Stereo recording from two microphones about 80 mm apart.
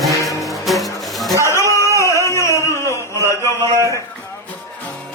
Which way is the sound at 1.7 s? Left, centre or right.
Left.